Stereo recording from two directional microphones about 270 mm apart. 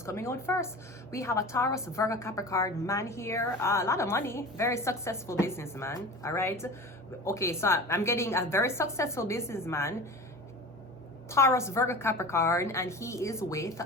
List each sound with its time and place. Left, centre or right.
0.0 s a woman's voice: centre
11.3 s a woman's voice: centre